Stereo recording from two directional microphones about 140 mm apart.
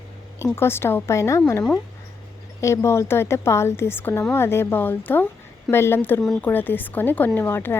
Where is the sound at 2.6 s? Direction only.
20° left (ahead or behind).